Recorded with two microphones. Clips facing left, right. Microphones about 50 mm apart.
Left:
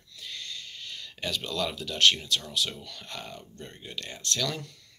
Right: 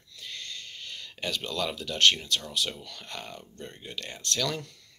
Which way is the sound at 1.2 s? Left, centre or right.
Right.